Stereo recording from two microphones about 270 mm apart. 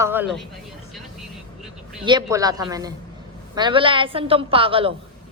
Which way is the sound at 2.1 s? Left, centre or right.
Centre.